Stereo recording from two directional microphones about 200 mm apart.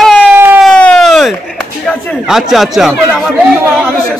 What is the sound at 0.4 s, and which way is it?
Siren, 10° right (ahead or behind).